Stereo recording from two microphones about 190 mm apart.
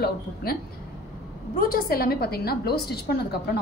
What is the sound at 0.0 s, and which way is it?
Speech, 55° left (ahead or behind).